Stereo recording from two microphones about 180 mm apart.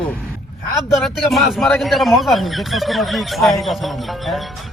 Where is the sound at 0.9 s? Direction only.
Centre (ahead or behind).